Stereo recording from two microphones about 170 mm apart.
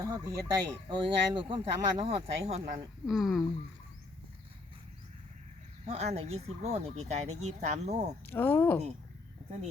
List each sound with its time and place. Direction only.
0.0 s speech: 25° right (ahead or behind)
3.1 s speech: centre (ahead or behind)
5.8 s speech: 40° right (ahead or behind)
8.3 s speech: 10° left (ahead or behind)